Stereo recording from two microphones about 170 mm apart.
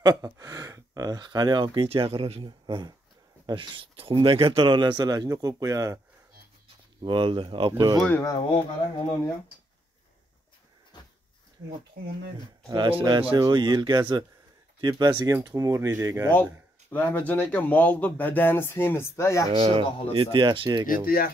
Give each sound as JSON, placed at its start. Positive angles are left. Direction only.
{"t": 0.0, "sound": "a man's voice", "side_deg": -20}
{"t": 7.0, "sound": "speech", "side_deg": -30}
{"t": 8.1, "sound": "speech", "side_deg": 15}
{"t": 8.4, "sound": "speech", "side_deg": 35}
{"t": 10.9, "sound": "a sound", "side_deg": 25}
{"t": 12.4, "sound": "speech", "side_deg": -25}
{"t": 16.9, "sound": "speech", "side_deg": 10}
{"t": 19.5, "sound": "a man's voice", "side_deg": -30}
{"t": 20.8, "sound": "speech", "side_deg": 55}